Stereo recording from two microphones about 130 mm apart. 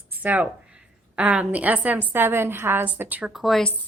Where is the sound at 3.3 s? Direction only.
Centre (ahead or behind).